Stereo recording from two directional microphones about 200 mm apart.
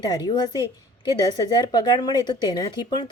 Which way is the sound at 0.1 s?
20° left (ahead or behind).